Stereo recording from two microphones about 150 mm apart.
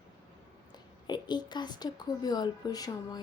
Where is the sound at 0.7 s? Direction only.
30° left (ahead or behind).